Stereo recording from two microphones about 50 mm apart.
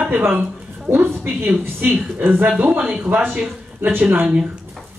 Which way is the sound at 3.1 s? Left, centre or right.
Right.